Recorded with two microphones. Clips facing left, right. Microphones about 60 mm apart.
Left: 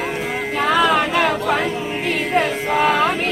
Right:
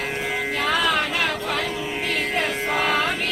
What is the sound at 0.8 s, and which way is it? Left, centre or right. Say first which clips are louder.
Chatter: left 6 dB; left.